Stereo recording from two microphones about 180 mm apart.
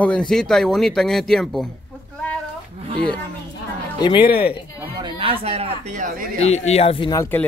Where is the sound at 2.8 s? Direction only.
30° right (ahead or behind).